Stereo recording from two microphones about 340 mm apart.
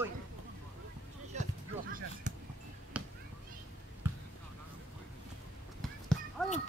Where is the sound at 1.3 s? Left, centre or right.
Centre.